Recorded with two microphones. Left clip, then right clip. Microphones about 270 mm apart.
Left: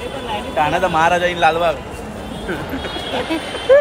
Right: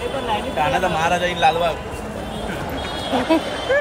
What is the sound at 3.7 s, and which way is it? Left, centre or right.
Speech, centre.